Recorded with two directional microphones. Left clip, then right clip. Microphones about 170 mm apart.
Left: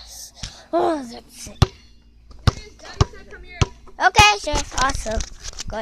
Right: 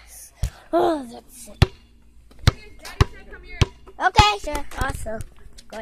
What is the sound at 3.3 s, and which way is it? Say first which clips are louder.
Chop: left 1 dB; 55° right (ahead or behind).